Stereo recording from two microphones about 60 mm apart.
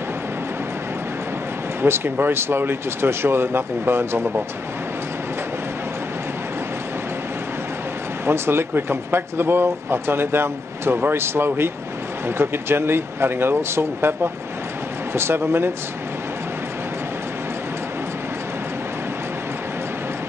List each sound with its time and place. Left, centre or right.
1.8 s speech: right
8.3 s speech: right